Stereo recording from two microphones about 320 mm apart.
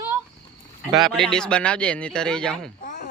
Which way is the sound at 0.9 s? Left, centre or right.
Centre.